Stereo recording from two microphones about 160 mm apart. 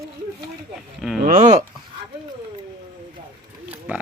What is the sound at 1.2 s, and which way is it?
Speech, 50° right (ahead or behind).